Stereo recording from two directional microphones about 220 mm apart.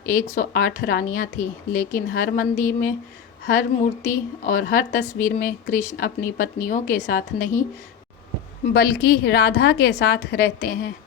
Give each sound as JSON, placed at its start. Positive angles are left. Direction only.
{"t": 0.1, "sound": "a woman's voice", "side_deg": 40}
{"t": 8.7, "sound": "a woman's voice", "side_deg": 45}